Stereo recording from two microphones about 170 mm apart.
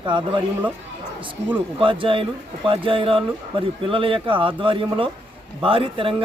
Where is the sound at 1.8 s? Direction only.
30° right (ahead or behind).